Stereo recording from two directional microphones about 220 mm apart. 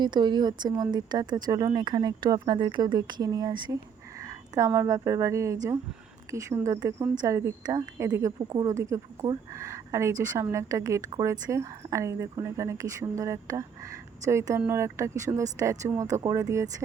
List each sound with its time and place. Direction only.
0.0 s speech: 20° right (ahead or behind)